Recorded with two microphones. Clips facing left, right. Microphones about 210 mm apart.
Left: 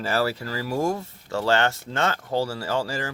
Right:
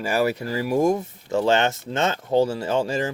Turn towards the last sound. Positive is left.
turn(degrees=-20)  # may be behind; listen again after turning